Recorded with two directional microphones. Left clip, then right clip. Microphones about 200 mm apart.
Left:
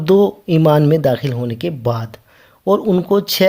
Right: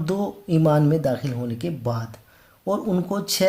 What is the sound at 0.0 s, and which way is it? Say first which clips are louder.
Speech: left 14 dB; 35° left (ahead or behind).